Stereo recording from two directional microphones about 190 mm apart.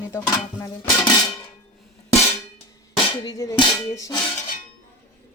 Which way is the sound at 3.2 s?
20° left (ahead or behind).